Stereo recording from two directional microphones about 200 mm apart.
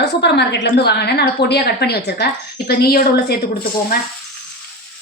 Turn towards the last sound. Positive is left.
turn(degrees=50)  # may be behind; listen again after turning